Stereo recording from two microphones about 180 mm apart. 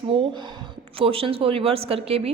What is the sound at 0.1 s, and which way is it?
A woman's voice, 30° right (ahead or behind).